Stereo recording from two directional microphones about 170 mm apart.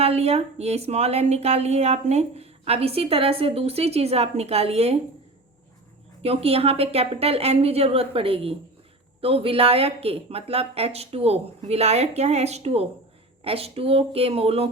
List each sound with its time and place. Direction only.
0.0 s speech: 35° right (ahead or behind)
6.2 s speech: 35° right (ahead or behind)